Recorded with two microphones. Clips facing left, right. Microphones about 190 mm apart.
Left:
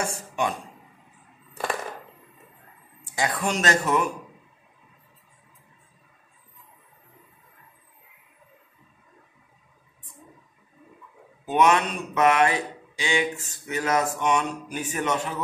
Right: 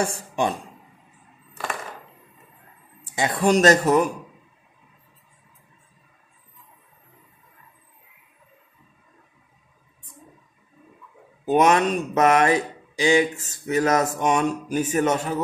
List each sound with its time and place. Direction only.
0.0 s speech: 30° right (ahead or behind)
3.0 s speech: 20° right (ahead or behind); by 4.1 s 40° right (ahead or behind)
11.4 s speech: 40° right (ahead or behind)